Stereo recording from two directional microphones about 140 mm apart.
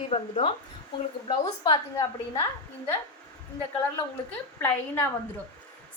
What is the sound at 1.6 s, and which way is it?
Speech, 30° left (ahead or behind).